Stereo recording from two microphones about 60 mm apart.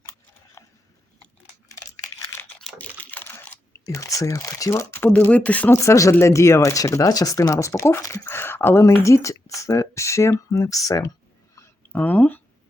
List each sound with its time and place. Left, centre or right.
0.6 s mechanisms: left
1.6 s crumpling: left
2.7 s computer keyboard: left
3.7 s speech: left
4.7 s speech: left
5.0 s speech: left
5.8 s speech: left
7.7 s speech: left
8.8 s speech: left
11.9 s speech: left